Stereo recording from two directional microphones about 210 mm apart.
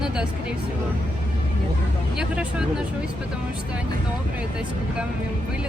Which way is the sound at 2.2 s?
5° right (ahead or behind).